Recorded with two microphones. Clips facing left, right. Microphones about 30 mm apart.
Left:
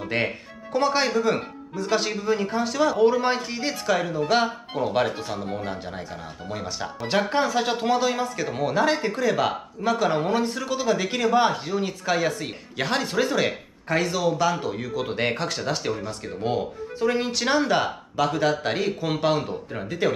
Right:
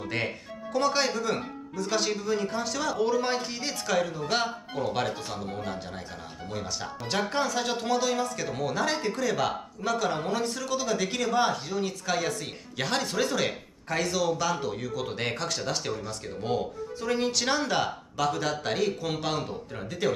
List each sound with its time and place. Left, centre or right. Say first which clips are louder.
0.1 s speech: left 6 dB; centre